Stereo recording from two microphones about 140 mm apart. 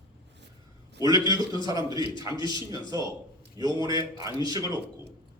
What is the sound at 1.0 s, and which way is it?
A man's voice, 25° right (ahead or behind).